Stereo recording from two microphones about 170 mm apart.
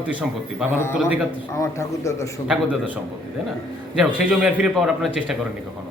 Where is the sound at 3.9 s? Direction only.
5° right (ahead or behind).